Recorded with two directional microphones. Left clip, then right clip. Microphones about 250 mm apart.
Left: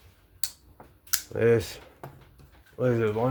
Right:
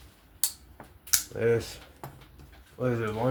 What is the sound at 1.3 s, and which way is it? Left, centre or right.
Speech, left.